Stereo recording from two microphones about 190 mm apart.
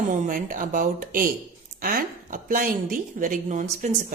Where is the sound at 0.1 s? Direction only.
45° right (ahead or behind).